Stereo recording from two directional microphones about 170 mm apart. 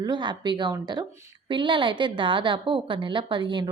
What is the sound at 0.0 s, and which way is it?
A woman's voice, 25° right (ahead or behind).